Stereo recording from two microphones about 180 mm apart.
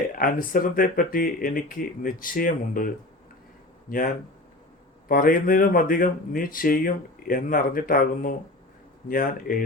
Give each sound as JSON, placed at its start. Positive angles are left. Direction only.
{"t": 0.2, "sound": "speech", "side_deg": 50}